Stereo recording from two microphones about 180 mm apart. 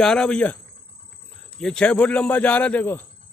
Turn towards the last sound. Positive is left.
turn(degrees=10)  # may be behind; listen again after turning